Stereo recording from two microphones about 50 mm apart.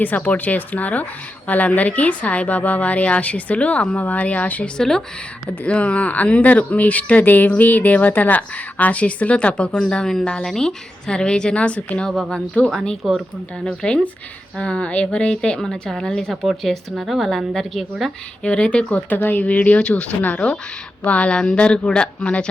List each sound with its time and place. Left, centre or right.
0.0 s speech: left
4.8 s a woman's voice: centre
5.6 s a woman's voice: left
12.3 s a woman's voice: centre
16.3 s speech: centre
18.4 s speech: left